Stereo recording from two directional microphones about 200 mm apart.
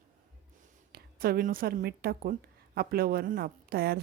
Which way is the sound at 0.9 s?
50° right (ahead or behind).